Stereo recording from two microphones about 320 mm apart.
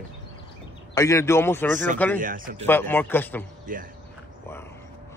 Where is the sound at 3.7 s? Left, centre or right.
Right.